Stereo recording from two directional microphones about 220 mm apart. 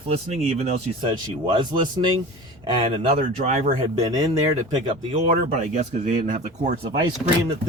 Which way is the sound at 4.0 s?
15° right (ahead or behind).